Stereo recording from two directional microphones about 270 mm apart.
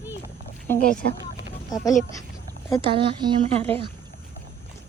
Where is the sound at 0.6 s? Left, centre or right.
Centre.